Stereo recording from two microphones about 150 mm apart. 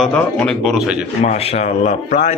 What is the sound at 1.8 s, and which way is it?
Speech, 50° left (ahead or behind).